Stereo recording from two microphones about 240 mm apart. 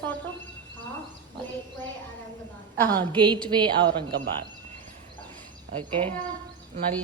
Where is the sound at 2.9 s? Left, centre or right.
Centre.